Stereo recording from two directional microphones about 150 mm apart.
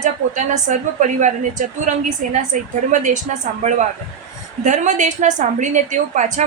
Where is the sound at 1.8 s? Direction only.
50° right (ahead or behind).